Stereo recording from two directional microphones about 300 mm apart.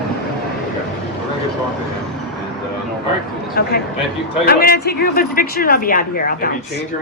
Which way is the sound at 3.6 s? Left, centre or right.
Left.